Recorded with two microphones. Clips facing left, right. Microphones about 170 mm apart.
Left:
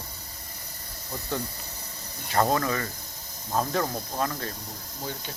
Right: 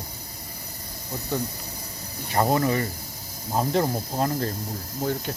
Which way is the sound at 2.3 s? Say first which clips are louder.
Right 2 dB; 15° right (ahead or behind).